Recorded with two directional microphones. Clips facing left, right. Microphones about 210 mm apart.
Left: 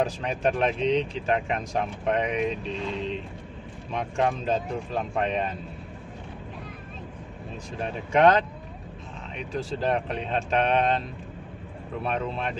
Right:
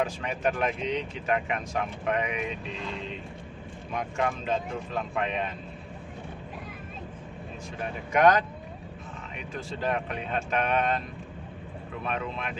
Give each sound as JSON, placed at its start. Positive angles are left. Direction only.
{"t": 0.0, "sound": "speech", "side_deg": 35}
{"t": 7.8, "sound": "speech", "side_deg": 30}